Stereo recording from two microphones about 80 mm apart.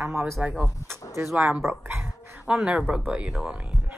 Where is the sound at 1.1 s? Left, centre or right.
Right.